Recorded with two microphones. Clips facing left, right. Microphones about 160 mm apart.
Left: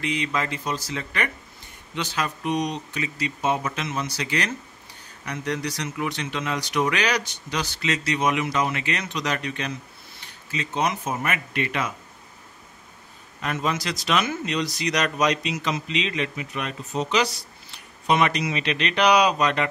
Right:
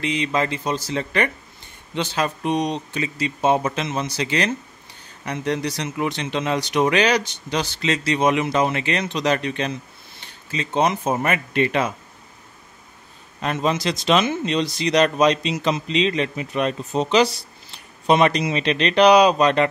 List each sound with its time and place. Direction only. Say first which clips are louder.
0.0 s speech: right 4 dB; 25° right (ahead or behind)
13.4 s speech: right 5 dB; 25° right (ahead or behind)